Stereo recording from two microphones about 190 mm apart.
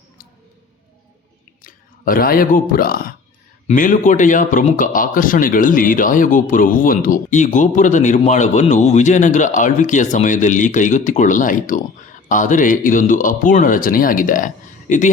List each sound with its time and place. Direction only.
1.6 s a man's voice: 50° left (ahead or behind)